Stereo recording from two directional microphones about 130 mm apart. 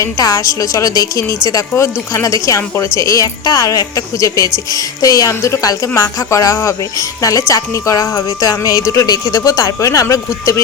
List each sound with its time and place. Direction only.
0.0 s speech: 25° left (ahead or behind)